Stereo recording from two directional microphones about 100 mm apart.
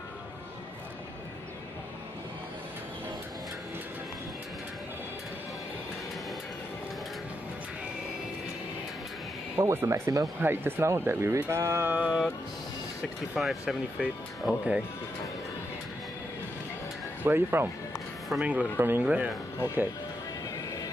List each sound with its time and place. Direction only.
9.6 s speech: 25° right (ahead or behind)
11.9 s speech: 15° right (ahead or behind)
13.4 s speech: centre (ahead or behind)
17.2 s speech: 20° right (ahead or behind)